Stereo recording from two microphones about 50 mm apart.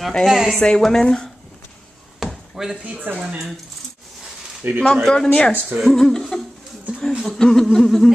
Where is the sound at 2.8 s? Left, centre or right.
Right.